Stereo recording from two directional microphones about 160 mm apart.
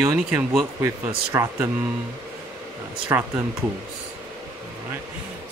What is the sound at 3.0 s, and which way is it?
Speech, 10° right (ahead or behind).